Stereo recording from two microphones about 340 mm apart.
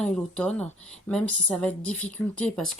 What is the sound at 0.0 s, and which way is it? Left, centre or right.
A woman's voice, centre.